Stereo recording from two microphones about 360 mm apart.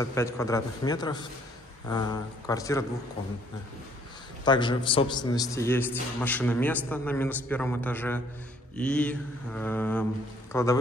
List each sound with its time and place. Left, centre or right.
0.0 s a man's voice: centre
4.5 s a man's voice: centre